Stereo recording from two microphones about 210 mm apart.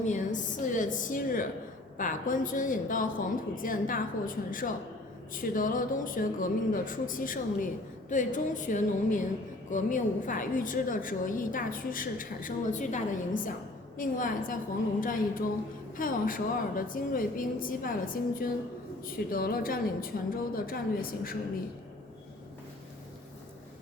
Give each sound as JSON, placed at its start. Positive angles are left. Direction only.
{"t": 0.0, "sound": "a woman's voice", "side_deg": 35}
{"t": 16.0, "sound": "a woman's voice", "side_deg": 40}